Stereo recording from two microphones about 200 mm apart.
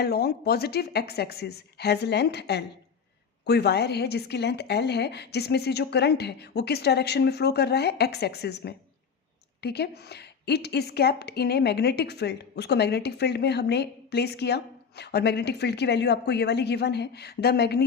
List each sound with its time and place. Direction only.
0.0 s a woman's voice: 50° left (ahead or behind)